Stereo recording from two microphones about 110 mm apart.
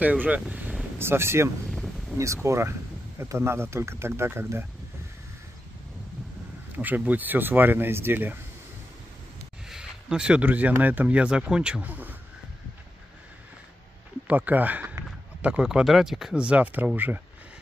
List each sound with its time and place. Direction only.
0.0 s speech: 15° right (ahead or behind)
1.7 s a sound: centre (ahead or behind)
2.1 s speech: 25° right (ahead or behind)
6.8 s speech: 15° right (ahead or behind)
9.7 s speech: 5° right (ahead or behind)
14.2 s speech: 15° right (ahead or behind)